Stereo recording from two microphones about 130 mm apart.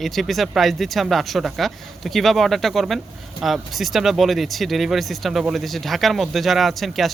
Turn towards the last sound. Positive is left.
turn(degrees=0)  # may be behind; listen again after turning